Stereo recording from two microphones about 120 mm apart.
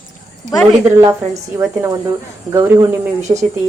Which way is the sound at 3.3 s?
40° right (ahead or behind).